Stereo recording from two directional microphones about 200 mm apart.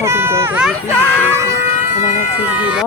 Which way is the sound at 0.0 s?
15° right (ahead or behind).